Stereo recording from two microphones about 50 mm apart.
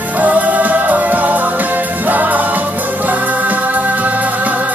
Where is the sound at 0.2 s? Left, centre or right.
Right.